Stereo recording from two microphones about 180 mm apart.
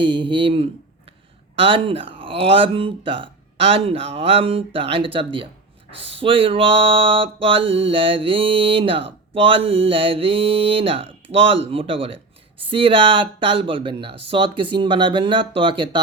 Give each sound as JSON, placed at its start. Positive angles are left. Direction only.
{"t": 0.0, "sound": "speech", "side_deg": -25}